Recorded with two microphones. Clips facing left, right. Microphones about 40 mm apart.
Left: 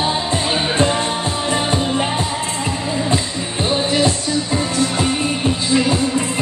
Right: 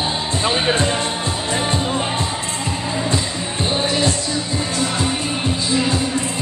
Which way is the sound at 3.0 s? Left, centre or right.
Centre.